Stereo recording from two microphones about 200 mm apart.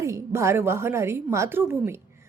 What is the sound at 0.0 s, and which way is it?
A woman's voice, 15° right (ahead or behind).